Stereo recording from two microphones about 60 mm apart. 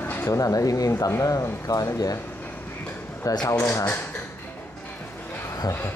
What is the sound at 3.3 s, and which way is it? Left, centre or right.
Speech, left.